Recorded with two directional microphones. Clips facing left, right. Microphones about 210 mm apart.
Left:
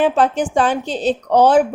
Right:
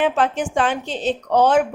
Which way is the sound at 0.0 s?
35° left (ahead or behind).